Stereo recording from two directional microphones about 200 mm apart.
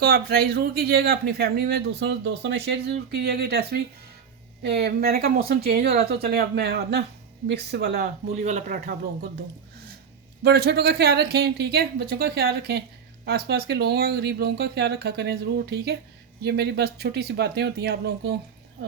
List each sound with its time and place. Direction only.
0.0 s speech: 50° right (ahead or behind)
10.4 s speech: 55° right (ahead or behind)